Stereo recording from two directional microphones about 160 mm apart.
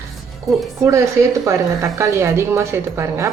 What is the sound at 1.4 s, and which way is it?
A woman's voice, 20° right (ahead or behind).